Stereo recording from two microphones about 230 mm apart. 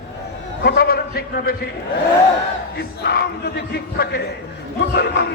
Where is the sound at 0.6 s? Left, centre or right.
Left.